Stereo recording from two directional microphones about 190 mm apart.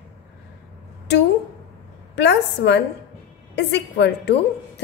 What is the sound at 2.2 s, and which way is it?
A woman's voice, 65° left (ahead or behind).